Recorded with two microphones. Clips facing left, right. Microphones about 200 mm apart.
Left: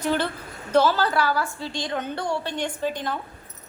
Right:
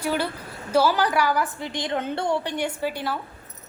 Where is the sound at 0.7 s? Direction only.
10° right (ahead or behind).